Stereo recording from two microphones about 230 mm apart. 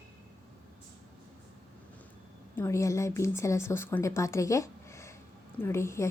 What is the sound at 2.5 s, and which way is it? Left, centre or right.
A woman's voice, centre.